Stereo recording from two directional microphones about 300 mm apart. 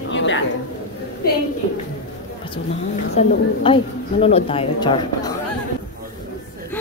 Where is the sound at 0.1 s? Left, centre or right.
Left.